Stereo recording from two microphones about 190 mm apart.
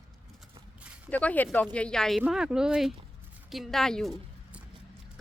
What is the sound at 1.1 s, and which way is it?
Speech, 10° left (ahead or behind).